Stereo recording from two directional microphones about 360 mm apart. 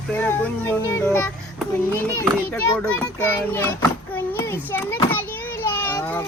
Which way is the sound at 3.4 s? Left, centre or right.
Centre.